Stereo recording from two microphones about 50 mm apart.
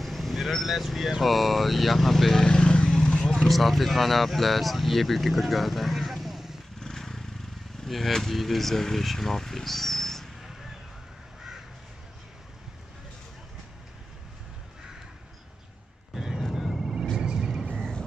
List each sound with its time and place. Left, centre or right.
0.0 s vehicle: centre
1.2 s speech: centre
3.3 s speech: centre
6.8 s a sound: centre
7.8 s speech: centre
16.2 s vehicle: centre
17.2 s a sound: centre